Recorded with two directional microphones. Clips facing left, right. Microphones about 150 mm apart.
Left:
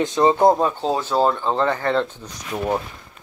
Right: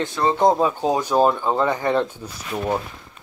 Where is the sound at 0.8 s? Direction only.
15° right (ahead or behind).